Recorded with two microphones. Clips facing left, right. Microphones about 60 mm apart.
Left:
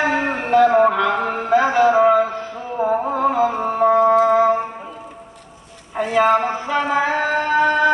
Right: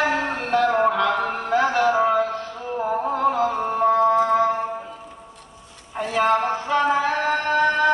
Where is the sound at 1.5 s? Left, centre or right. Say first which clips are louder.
Left 5 dB; centre.